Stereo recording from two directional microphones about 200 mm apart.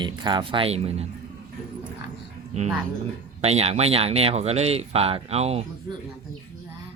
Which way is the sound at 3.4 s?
30° right (ahead or behind).